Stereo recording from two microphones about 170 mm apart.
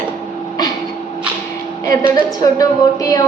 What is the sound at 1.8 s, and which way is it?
A woman's voice, 20° left (ahead or behind).